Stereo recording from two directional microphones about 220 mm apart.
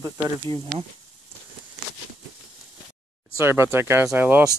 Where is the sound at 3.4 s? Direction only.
10° right (ahead or behind).